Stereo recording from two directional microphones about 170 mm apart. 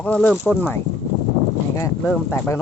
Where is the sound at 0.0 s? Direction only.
10° left (ahead or behind).